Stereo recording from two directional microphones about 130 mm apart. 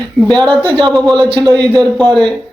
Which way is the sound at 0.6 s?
40° right (ahead or behind).